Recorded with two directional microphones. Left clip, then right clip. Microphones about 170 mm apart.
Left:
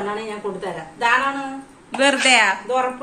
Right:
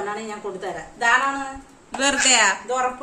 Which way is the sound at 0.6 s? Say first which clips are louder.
Even; 40° right (ahead or behind).